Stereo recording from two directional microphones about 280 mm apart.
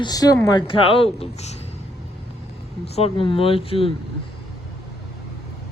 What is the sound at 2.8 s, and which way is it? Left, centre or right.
Speech, left.